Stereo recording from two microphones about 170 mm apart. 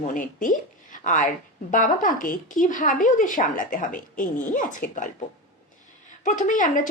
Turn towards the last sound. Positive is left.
turn(degrees=50)  # may be behind; listen again after turning